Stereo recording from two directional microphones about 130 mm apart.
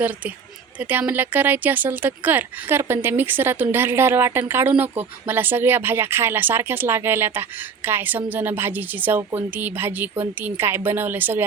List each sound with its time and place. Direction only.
0.8 s a woman's voice: 15° right (ahead or behind)